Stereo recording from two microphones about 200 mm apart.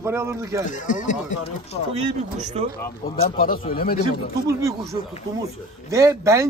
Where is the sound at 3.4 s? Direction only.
45° left (ahead or behind).